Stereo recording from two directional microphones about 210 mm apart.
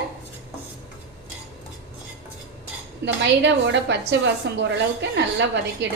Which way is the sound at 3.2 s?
60° right (ahead or behind).